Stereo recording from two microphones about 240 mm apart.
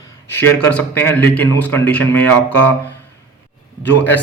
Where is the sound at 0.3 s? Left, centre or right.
Centre.